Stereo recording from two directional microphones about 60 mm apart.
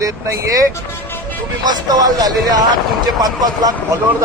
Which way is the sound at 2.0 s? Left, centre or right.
Right.